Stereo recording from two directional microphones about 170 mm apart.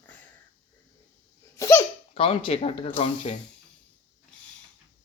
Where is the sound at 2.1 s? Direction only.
35° left (ahead or behind).